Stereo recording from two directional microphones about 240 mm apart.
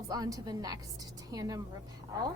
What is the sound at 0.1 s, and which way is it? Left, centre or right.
A woman's voice, centre.